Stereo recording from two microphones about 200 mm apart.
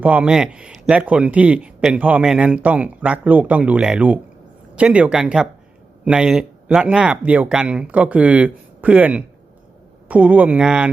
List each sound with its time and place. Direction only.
0.0 s a man's voice: 5° right (ahead or behind)